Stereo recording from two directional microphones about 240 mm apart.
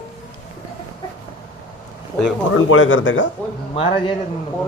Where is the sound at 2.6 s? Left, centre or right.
Left.